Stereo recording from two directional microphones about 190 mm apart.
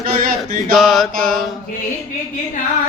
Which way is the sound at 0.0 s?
50° right (ahead or behind).